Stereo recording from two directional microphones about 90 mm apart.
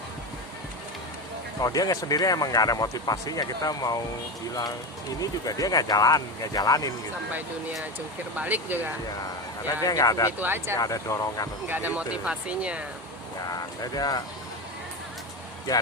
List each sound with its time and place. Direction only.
1.6 s speech: 40° left (ahead or behind)
5.2 s speech: 40° left (ahead or behind)
8.4 s speech: 20° right (ahead or behind)
9.8 s speech: 40° left (ahead or behind)
10.4 s speech: 25° right (ahead or behind)
10.8 s speech: 40° left (ahead or behind)
11.7 s speech: 20° right (ahead or behind)
13.5 s speech: 45° left (ahead or behind)